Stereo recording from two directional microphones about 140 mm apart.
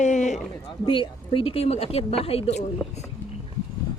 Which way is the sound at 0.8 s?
40° left (ahead or behind).